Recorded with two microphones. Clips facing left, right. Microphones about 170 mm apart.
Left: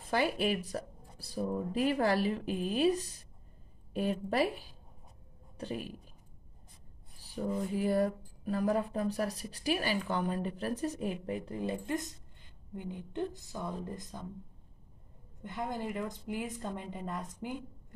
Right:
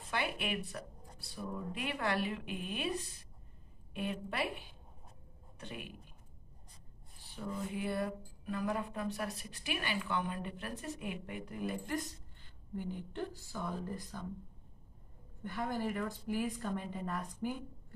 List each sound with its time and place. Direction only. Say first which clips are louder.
0.1 s speech: left 7 dB; 35° left (ahead or behind)
7.2 s speech: left 6 dB; 40° left (ahead or behind); by 14.2 s 20° left (ahead or behind)
15.4 s speech: even; 20° left (ahead or behind)